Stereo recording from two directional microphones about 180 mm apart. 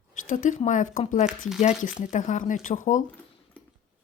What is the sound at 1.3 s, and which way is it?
Speech, 5° right (ahead or behind).